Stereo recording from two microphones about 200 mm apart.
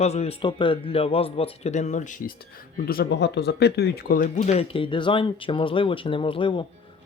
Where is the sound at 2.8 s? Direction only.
55° left (ahead or behind).